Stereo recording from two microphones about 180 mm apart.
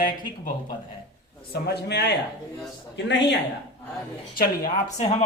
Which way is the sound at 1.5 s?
65° left (ahead or behind).